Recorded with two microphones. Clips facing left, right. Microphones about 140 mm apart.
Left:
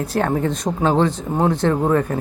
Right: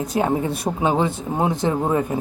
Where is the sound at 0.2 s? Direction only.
10° right (ahead or behind).